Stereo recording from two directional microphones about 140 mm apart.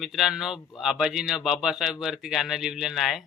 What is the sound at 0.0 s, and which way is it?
Speech, centre (ahead or behind).